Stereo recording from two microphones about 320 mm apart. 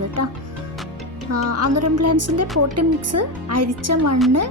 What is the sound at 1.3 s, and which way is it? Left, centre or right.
A woman's voice, right.